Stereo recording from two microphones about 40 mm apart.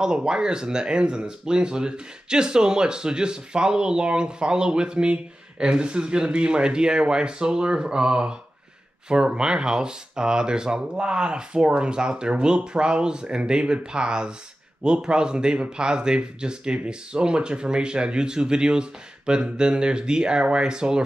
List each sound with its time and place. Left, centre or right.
0.0 s speech: centre